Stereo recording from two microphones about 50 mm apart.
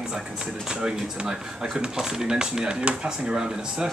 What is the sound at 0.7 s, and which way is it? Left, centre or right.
Speech, centre.